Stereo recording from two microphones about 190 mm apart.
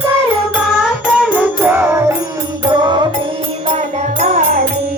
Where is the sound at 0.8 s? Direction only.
5° right (ahead or behind); by 3.1 s 25° right (ahead or behind).